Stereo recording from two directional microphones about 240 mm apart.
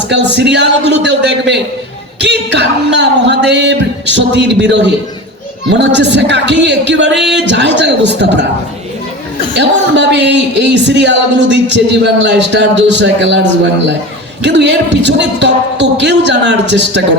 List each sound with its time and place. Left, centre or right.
0.1 s speech: right
9.6 s speech: right
14.4 s speech: right